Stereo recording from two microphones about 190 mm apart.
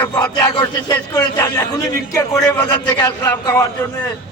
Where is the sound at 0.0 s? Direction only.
15° left (ahead or behind).